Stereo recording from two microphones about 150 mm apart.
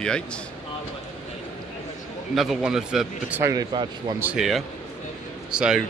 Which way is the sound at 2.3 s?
Centre (ahead or behind).